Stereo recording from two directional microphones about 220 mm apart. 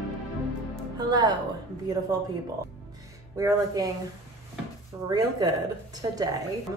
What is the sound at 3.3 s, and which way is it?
Speech, 15° right (ahead or behind).